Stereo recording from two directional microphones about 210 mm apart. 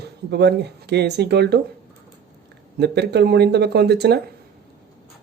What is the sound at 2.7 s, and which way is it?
Speech, 50° right (ahead or behind).